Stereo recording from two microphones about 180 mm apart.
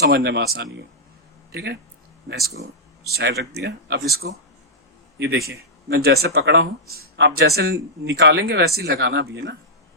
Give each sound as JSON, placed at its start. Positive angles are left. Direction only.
{"t": 0.0, "sound": "speech", "side_deg": -65}
{"t": 3.1, "sound": "speech", "side_deg": -60}
{"t": 5.1, "sound": "a man's voice", "side_deg": -75}
{"t": 5.5, "sound": "speech", "side_deg": -60}